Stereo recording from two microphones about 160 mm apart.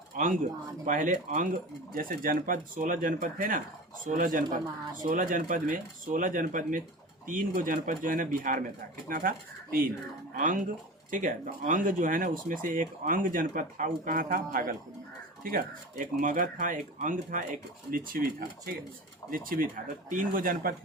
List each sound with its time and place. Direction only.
0.9 s speech: 55° right (ahead or behind)